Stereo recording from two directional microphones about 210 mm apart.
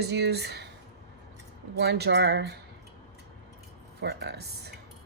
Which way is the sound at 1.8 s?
50° right (ahead or behind).